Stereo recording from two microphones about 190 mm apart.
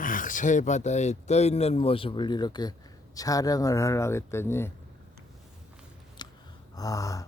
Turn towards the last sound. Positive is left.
turn(degrees=15)  # may be behind; listen again after turning